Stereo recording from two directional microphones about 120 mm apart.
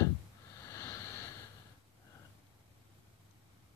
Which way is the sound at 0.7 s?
25° left (ahead or behind).